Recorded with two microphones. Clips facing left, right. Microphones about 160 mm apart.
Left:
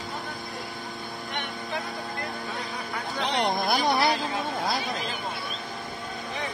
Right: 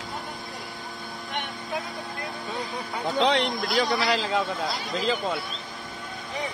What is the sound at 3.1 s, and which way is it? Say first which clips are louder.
A man's voice: right 4 dB; 90° right.